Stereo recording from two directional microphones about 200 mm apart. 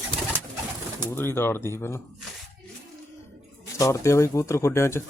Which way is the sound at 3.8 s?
15° left (ahead or behind).